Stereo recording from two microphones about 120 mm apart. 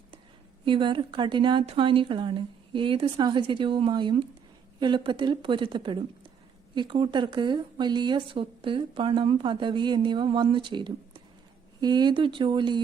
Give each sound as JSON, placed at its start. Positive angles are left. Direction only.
{"t": 0.6, "sound": "a woman's voice", "side_deg": -45}